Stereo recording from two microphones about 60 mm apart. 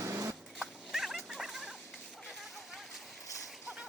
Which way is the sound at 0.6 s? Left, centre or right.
Centre.